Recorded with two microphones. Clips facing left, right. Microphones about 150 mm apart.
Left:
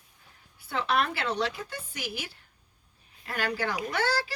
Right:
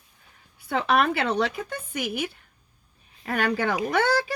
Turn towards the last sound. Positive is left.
turn(degrees=-55)  # may be behind; listen again after turning